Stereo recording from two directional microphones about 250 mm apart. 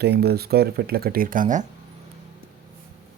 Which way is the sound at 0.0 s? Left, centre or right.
Right.